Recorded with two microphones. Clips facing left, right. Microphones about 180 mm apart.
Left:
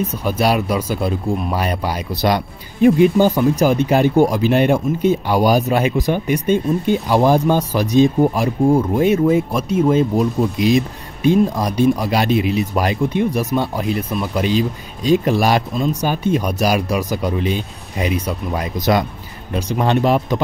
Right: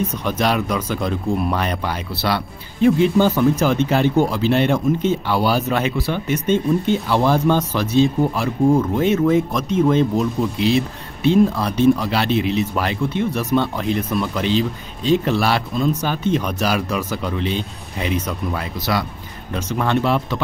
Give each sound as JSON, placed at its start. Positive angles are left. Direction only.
{"t": 0.2, "sound": "speech", "side_deg": 10}